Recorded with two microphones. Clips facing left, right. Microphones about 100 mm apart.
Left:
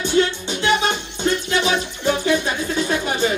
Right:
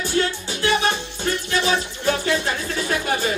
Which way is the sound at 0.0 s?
20° left (ahead or behind).